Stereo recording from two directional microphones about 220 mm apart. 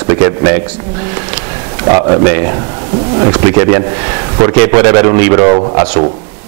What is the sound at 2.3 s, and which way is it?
A man's voice, 20° right (ahead or behind).